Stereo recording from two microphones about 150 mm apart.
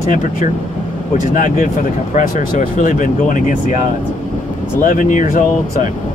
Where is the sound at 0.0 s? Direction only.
60° left (ahead or behind).